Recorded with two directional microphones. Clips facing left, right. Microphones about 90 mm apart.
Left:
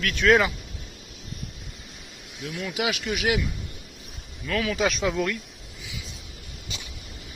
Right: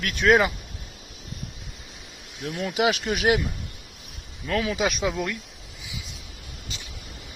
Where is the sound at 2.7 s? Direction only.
30° right (ahead or behind).